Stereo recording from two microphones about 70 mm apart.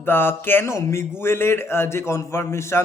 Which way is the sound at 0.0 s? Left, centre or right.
Left.